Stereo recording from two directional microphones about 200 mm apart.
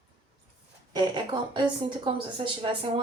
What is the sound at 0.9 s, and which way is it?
A woman's voice, 20° right (ahead or behind).